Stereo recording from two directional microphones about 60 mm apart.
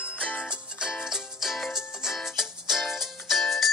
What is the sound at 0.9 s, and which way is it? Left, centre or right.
Music, centre.